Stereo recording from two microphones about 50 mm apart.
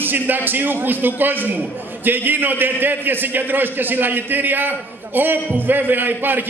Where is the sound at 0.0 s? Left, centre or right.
Right.